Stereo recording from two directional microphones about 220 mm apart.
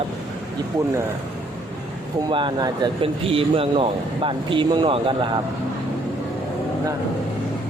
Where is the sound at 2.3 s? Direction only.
20° right (ahead or behind).